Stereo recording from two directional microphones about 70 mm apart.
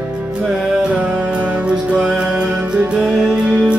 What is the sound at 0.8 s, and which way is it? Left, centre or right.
Music, centre.